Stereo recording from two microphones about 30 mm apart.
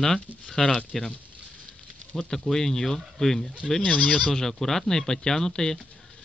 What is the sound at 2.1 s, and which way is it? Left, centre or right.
A man's voice, centre.